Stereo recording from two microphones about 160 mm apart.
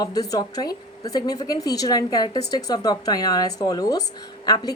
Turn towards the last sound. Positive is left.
turn(degrees=25)  # may be behind; listen again after turning